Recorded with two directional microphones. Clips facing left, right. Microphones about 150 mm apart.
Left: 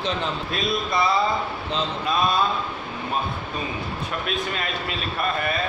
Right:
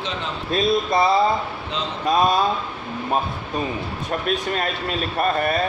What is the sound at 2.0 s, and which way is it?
Speech, 40° right (ahead or behind).